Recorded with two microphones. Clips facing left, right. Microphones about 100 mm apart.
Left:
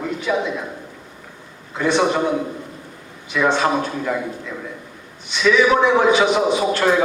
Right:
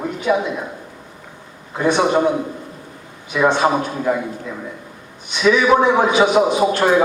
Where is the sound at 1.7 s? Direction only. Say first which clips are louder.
Right 2 dB; 15° right (ahead or behind).